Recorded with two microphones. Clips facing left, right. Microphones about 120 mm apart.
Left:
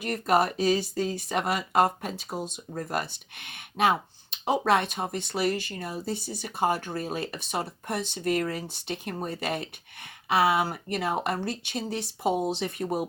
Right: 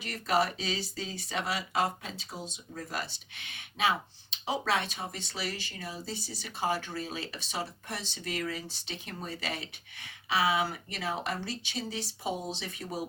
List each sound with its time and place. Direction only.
0.0 s speech: 50° left (ahead or behind)